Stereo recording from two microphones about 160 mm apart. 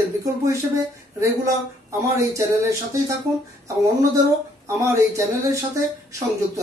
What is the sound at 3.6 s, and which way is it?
Speech, 20° right (ahead or behind).